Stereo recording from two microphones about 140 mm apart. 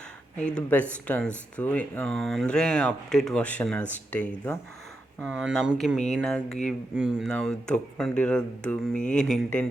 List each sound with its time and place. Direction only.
0.3 s speech: 5° left (ahead or behind)
5.2 s speech: 5° right (ahead or behind)
7.3 s speech: 5° left (ahead or behind)